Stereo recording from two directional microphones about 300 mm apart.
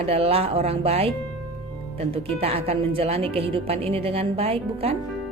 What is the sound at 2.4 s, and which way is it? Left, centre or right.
A woman's voice, centre.